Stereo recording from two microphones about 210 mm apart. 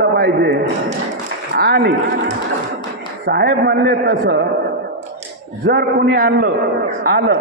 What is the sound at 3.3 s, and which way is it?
A man's voice, 50° right (ahead or behind).